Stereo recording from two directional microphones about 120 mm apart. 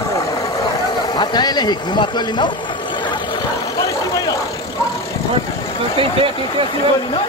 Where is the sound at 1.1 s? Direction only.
35° left (ahead or behind).